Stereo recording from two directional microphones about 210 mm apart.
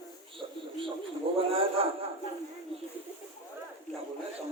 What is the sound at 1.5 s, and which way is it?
Speech, 25° right (ahead or behind).